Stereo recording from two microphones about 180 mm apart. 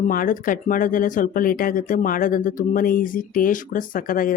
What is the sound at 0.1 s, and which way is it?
Speech, 50° left (ahead or behind).